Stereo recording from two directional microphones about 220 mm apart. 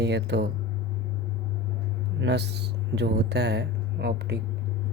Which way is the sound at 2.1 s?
50° right (ahead or behind).